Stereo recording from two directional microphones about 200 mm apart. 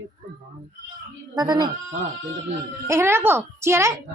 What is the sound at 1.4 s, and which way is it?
Speech, 20° right (ahead or behind).